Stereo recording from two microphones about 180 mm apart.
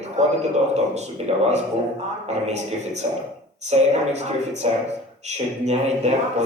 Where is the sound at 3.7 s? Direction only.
35° right (ahead or behind).